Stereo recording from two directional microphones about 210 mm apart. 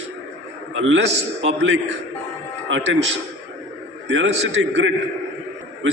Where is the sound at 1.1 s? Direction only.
30° right (ahead or behind).